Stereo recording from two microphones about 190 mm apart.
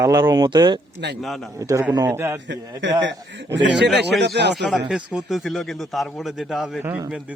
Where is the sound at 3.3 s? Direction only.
70° right (ahead or behind).